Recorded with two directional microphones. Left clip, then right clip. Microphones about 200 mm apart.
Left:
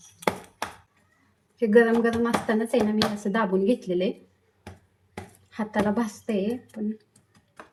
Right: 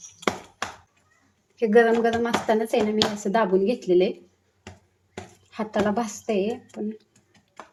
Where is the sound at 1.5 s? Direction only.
30° right (ahead or behind).